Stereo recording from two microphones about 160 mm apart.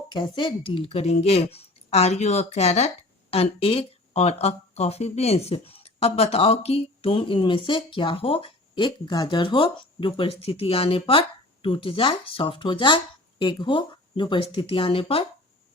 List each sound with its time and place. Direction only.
0.1 s a woman's voice: 30° left (ahead or behind)